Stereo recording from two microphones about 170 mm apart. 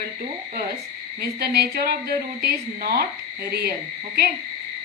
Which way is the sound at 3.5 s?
65° right (ahead or behind).